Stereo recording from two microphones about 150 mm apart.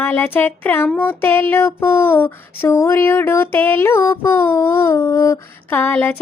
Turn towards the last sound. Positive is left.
turn(degrees=10)  # may be behind; listen again after turning